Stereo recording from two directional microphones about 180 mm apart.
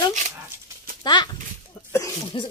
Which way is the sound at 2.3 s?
25° left (ahead or behind).